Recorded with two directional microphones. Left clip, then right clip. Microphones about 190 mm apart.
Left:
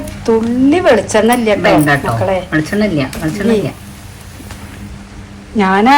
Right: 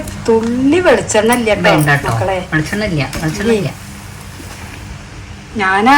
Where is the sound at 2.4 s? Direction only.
20° left (ahead or behind).